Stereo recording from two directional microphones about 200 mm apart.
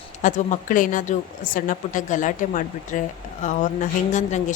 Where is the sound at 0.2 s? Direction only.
40° left (ahead or behind).